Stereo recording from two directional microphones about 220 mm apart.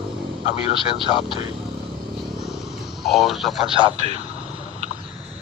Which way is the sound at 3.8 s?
30° right (ahead or behind).